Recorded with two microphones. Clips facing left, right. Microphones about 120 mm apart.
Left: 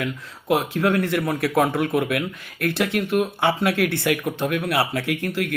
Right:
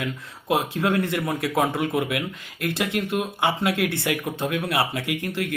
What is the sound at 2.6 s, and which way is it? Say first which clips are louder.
Speech: left 3 dB; 20° right (ahead or behind).